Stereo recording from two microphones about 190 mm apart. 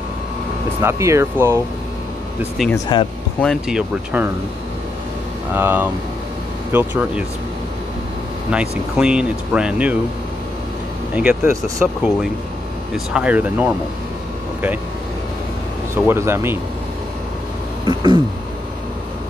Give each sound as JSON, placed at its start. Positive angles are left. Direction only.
{"t": 0.7, "sound": "speech", "side_deg": -15}
{"t": 2.6, "sound": "speech", "side_deg": 0}
{"t": 5.5, "sound": "speech", "side_deg": -10}
{"t": 8.5, "sound": "speech", "side_deg": -5}
{"t": 11.1, "sound": "speech", "side_deg": -10}
{"t": 16.1, "sound": "speech", "side_deg": -15}
{"t": 17.8, "sound": "a sound", "side_deg": -25}